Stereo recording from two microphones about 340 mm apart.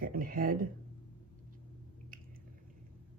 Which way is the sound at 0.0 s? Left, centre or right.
Right.